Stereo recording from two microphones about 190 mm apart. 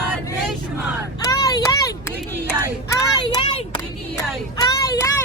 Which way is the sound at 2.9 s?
25° left (ahead or behind).